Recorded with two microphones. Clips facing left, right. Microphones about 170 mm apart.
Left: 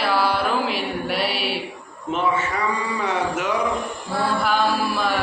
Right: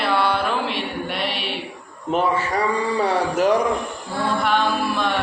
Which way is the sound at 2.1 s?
35° right (ahead or behind).